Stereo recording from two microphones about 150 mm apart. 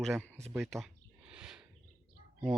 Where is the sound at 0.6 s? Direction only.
Centre (ahead or behind).